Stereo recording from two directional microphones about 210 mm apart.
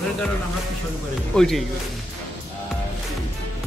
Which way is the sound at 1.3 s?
Centre (ahead or behind).